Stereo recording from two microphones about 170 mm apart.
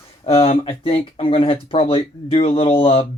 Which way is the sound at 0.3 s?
35° left (ahead or behind).